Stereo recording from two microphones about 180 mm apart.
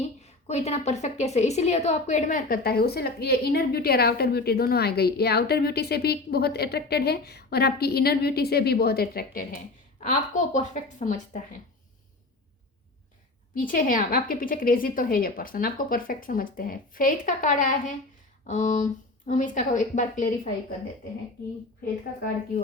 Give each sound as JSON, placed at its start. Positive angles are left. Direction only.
{"t": 0.2, "sound": "a woman's voice", "side_deg": 40}
{"t": 10.0, "sound": "a woman's voice", "side_deg": 45}
{"t": 13.5, "sound": "a woman's voice", "side_deg": 50}